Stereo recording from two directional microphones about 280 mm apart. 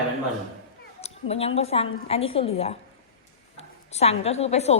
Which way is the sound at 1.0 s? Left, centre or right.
Left.